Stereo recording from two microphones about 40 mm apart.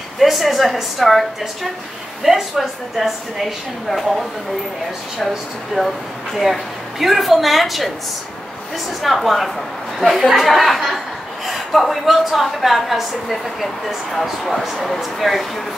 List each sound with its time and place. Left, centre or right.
0.2 s a woman's voice: centre
2.2 s a woman's voice: centre
5.8 s speech: right
7.0 s a woman's voice: centre
9.0 s a woman's voice: centre